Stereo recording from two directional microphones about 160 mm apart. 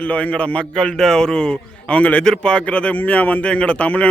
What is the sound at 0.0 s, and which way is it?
A man's voice, 10° left (ahead or behind).